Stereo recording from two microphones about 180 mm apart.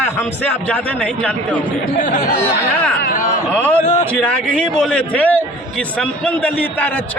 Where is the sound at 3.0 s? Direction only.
55° left (ahead or behind).